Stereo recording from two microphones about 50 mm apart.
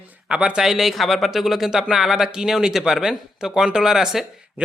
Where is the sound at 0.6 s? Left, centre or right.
Centre.